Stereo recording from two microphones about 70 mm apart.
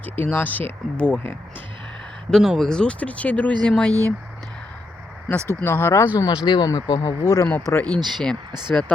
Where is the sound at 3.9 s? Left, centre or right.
Right.